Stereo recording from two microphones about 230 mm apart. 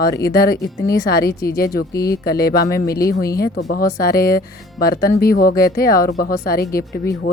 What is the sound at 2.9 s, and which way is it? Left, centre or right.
Speech, centre.